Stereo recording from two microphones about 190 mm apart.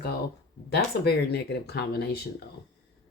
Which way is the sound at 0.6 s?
55° left (ahead or behind).